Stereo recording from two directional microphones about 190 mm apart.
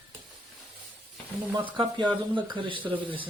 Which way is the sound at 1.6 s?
25° right (ahead or behind).